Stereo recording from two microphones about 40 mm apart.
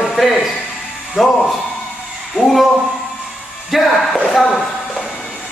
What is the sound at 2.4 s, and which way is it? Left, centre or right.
Speech, centre.